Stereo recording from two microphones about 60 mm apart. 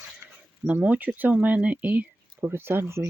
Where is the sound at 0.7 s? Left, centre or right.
Right.